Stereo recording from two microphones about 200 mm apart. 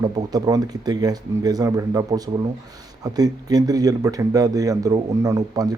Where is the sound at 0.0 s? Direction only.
20° right (ahead or behind).